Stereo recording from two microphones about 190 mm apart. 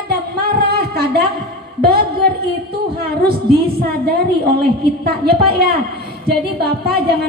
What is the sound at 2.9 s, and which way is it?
A woman's voice, 55° right (ahead or behind).